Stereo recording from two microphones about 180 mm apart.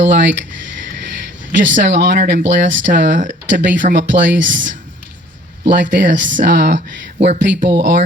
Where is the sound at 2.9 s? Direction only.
50° right (ahead or behind).